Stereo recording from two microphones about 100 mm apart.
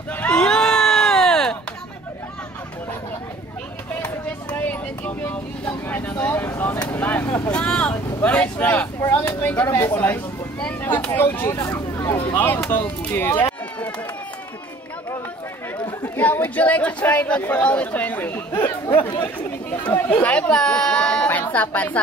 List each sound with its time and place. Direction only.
0.3 s cat: 5° left (ahead or behind)
4.0 s vehicle: 15° left (ahead or behind)
11.1 s speech: 20° left (ahead or behind)
13.5 s run: 15° left (ahead or behind)
16.0 s speech: 20° left (ahead or behind)